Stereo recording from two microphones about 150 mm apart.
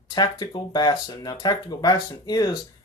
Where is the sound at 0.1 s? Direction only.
30° left (ahead or behind).